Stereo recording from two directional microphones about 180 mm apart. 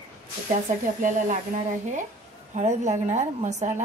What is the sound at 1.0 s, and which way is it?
A woman's voice, 45° right (ahead or behind).